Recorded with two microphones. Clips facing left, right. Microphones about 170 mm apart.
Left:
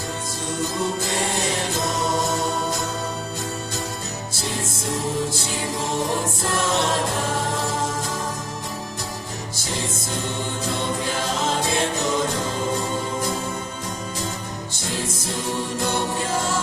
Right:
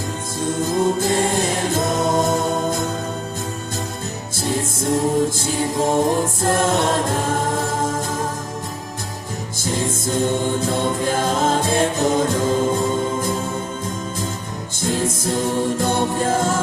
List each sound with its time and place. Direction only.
0.6 s music: 50° right (ahead or behind)
4.4 s music: 50° right (ahead or behind)
10.7 s music: 50° right (ahead or behind)
14.8 s music: 50° right (ahead or behind)